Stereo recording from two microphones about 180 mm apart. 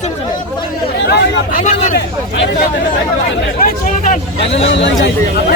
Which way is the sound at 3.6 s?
50° left (ahead or behind).